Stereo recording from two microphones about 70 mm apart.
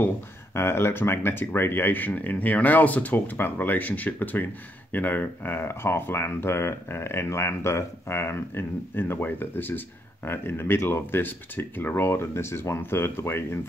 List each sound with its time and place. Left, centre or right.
0.6 s speech: left